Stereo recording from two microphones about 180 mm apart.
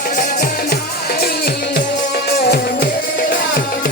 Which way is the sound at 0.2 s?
50° left (ahead or behind).